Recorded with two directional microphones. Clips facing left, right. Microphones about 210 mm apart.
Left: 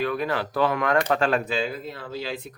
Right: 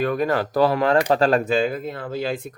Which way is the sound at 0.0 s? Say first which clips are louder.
Right 5 dB; 45° right (ahead or behind).